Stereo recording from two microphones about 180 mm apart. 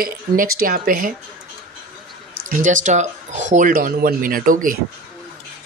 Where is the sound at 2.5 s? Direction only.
45° right (ahead or behind).